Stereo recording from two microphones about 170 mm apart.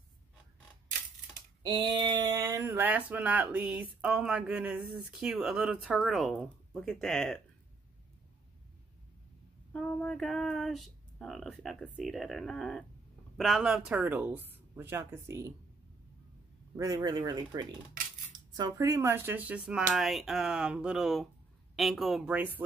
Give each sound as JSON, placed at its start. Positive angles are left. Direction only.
{"t": 1.6, "sound": "speech", "side_deg": -25}
{"t": 9.7, "sound": "speech", "side_deg": 5}
{"t": 16.7, "sound": "speech", "side_deg": -20}